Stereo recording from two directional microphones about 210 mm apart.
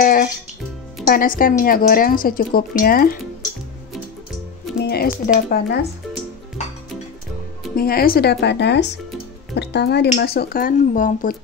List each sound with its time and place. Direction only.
0.0 s music: 40° left (ahead or behind)
1.0 s a woman's voice: 40° left (ahead or behind)
4.8 s a sound: 50° left (ahead or behind)
5.2 s a woman's voice: 40° left (ahead or behind)
7.7 s speech: 45° left (ahead or behind)